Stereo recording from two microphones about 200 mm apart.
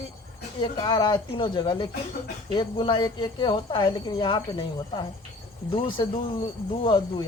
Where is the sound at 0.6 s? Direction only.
20° left (ahead or behind).